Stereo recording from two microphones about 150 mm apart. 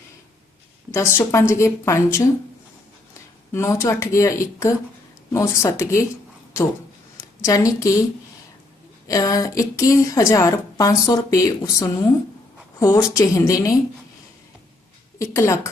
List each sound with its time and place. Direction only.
0.9 s a woman's voice: 15° left (ahead or behind)
3.5 s a woman's voice: 20° left (ahead or behind)
7.2 s a woman's voice: 20° left (ahead or behind)
9.0 s a woman's voice: 25° left (ahead or behind)
15.2 s a woman's voice: 20° left (ahead or behind)